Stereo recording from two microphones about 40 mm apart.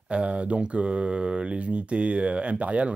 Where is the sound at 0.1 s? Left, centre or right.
Right.